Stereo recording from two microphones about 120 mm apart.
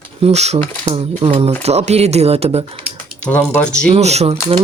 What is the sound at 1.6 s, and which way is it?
Speech, 65° right (ahead or behind).